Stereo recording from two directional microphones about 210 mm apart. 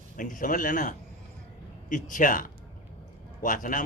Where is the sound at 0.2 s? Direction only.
40° left (ahead or behind).